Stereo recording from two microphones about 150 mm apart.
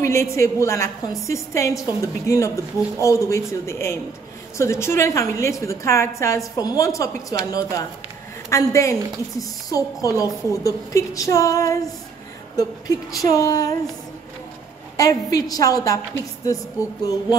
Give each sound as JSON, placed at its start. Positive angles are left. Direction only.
{"t": 0.0, "sound": "a woman's voice", "side_deg": 20}
{"t": 15.0, "sound": "a woman's voice", "side_deg": 25}
{"t": 17.0, "sound": "a woman's voice", "side_deg": 25}